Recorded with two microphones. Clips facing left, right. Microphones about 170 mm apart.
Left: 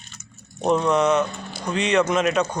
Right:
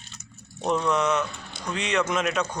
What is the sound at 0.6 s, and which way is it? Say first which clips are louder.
Speech: left 5 dB; 30° left (ahead or behind).